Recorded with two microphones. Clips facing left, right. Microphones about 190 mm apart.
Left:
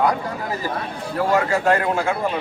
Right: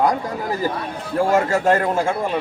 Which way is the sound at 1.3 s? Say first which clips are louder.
Right 1 dB; 45° right (ahead or behind).